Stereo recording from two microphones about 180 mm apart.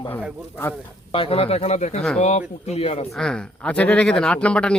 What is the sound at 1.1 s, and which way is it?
Speech, 30° left (ahead or behind).